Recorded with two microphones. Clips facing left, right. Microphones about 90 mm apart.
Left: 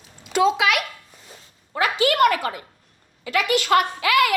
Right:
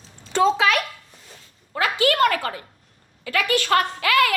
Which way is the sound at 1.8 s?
20° left (ahead or behind).